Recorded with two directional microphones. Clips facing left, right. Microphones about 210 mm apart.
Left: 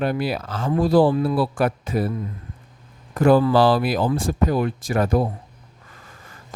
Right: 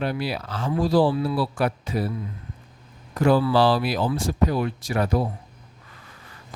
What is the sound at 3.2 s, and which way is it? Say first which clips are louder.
Speech: left 3 dB; 50° left (ahead or behind).